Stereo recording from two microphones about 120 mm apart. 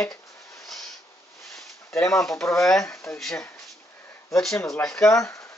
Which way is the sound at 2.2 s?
5° left (ahead or behind).